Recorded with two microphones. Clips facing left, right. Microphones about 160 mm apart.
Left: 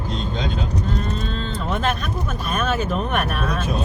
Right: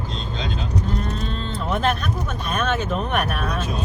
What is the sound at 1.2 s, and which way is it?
Vehicle, centre (ahead or behind).